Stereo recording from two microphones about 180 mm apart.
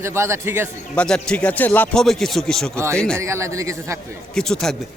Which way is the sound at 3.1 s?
15° right (ahead or behind).